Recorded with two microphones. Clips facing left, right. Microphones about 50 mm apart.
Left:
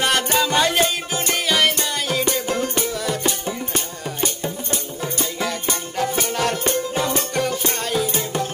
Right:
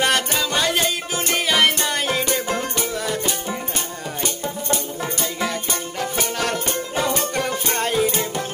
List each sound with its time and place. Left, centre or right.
0.0 s music: centre
1.9 s music: right
5.2 s music: centre
7.5 s music: right